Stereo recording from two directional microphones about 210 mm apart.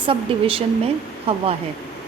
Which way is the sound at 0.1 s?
25° right (ahead or behind).